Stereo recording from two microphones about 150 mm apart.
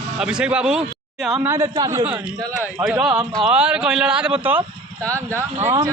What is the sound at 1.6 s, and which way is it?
Speech, 35° right (ahead or behind).